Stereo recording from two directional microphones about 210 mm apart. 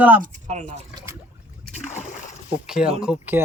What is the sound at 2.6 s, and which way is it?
Speech, 5° right (ahead or behind).